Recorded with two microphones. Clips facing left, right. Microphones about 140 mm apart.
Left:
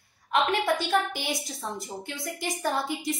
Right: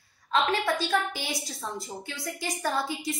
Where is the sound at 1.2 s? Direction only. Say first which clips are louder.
Left 2 dB; 15° left (ahead or behind).